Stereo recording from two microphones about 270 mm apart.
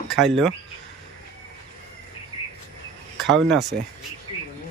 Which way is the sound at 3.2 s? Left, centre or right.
Centre.